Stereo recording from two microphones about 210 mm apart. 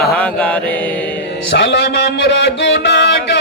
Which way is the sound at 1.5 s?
50° left (ahead or behind).